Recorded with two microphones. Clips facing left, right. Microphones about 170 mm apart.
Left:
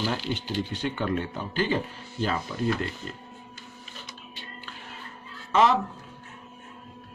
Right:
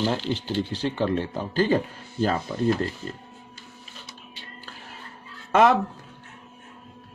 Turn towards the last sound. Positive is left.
turn(degrees=-55)  # may be behind; listen again after turning